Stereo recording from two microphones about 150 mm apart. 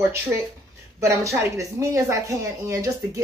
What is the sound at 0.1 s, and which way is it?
A woman's voice, 15° right (ahead or behind).